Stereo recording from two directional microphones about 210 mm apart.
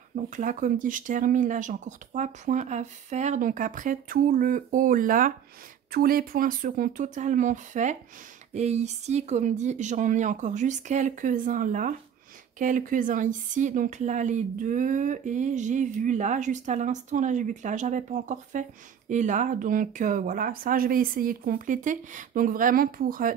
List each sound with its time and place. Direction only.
0.1 s a woman's voice: 35° right (ahead or behind)